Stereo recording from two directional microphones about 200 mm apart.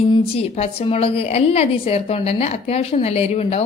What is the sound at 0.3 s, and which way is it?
A woman's voice, 30° left (ahead or behind).